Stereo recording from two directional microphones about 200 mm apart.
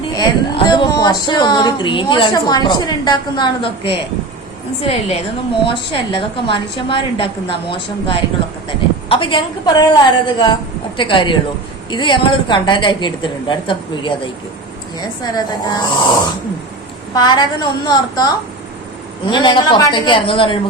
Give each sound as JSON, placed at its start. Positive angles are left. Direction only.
{"t": 0.1, "sound": "a woman's voice", "side_deg": 20}
{"t": 17.2, "sound": "a woman's voice", "side_deg": 20}